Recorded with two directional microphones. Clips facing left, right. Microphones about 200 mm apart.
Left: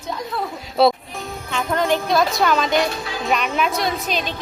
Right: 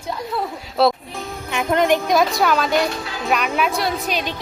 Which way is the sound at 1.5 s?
20° right (ahead or behind).